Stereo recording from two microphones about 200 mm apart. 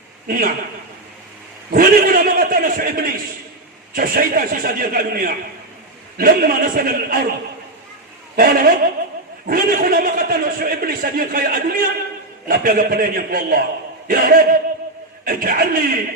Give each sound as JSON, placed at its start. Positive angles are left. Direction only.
{"t": 0.3, "sound": "a man's voice", "side_deg": -45}
{"t": 1.7, "sound": "a man's voice", "side_deg": -45}
{"t": 8.4, "sound": "a man's voice", "side_deg": -45}